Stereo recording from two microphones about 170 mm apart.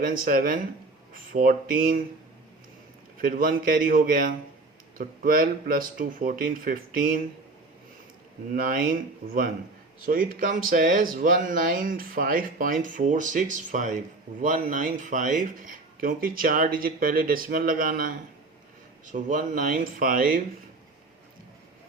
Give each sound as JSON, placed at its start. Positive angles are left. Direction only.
{"t": 0.0, "sound": "speech", "side_deg": -55}
{"t": 3.2, "sound": "speech", "side_deg": -55}
{"t": 8.5, "sound": "speech", "side_deg": -55}